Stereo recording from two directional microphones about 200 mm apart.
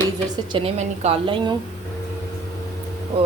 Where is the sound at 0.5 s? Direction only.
30° right (ahead or behind).